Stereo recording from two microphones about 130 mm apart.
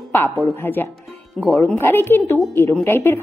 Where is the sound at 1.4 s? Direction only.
5° left (ahead or behind).